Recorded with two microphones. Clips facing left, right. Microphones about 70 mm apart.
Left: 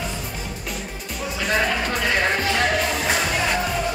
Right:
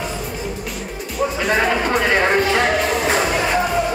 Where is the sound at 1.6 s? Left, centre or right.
Right.